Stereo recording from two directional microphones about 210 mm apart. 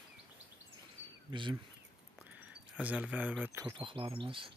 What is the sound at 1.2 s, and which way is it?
Speech, 25° right (ahead or behind).